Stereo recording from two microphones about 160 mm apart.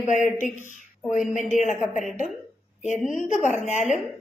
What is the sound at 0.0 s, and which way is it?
A woman's voice, 50° left (ahead or behind).